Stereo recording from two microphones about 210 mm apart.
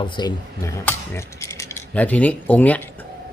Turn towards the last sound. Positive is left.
turn(degrees=10)  # may be behind; listen again after turning